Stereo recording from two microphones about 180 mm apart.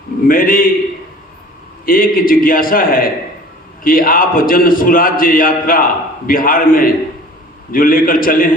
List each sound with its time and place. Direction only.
0.3 s a man's voice: 50° left (ahead or behind)
1.8 s a man's voice: 50° left (ahead or behind)